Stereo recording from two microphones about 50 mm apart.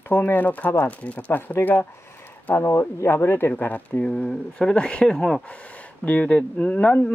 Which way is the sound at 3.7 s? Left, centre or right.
Left.